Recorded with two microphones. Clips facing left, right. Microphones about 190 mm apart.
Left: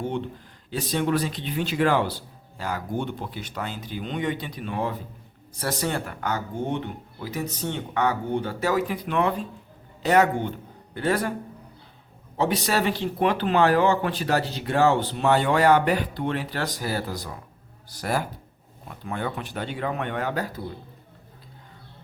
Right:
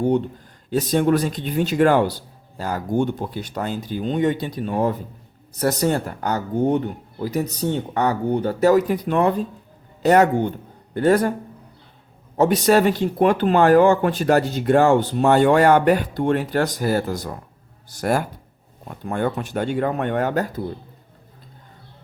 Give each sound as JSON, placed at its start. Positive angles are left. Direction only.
{"t": 0.0, "sound": "speech", "side_deg": -40}
{"t": 12.4, "sound": "speech", "side_deg": -45}